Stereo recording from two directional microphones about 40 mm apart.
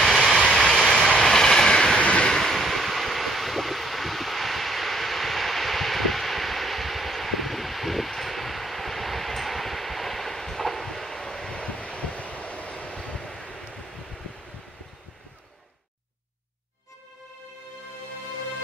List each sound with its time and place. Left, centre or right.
0.0 s vehicle: centre
1.2 s train: centre
2.0 s waves: left
2.2 s vehicle: centre
11.5 s vehicle: left